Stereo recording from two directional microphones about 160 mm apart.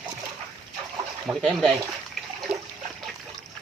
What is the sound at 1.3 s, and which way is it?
Speech, centre (ahead or behind).